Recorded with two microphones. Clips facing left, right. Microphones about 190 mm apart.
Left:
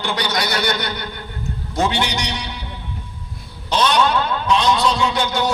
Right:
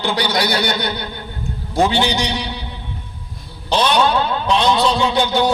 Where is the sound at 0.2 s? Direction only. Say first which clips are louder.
Right 3 dB; 30° right (ahead or behind).